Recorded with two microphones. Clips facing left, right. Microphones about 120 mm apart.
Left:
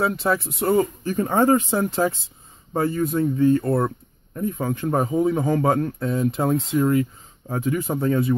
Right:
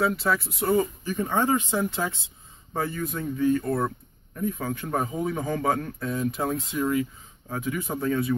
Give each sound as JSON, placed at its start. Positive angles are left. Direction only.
{"t": 0.0, "sound": "speech", "side_deg": 25}
{"t": 1.1, "sound": "speech", "side_deg": 40}